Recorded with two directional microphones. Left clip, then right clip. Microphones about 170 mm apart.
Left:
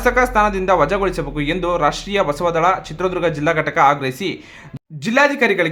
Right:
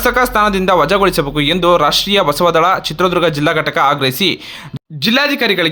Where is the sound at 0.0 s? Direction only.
25° right (ahead or behind).